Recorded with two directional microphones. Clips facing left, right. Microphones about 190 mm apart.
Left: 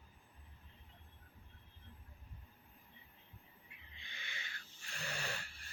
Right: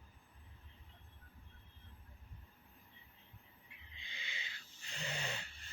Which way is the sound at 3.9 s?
20° right (ahead or behind).